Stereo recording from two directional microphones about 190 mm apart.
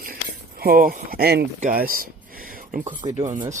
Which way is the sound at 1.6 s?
50° right (ahead or behind).